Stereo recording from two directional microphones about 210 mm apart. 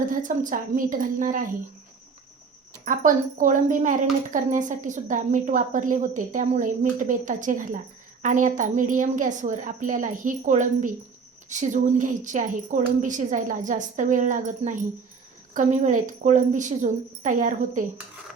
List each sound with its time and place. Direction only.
0.0 s a woman's voice: 40° right (ahead or behind)
2.8 s a woman's voice: 40° right (ahead or behind)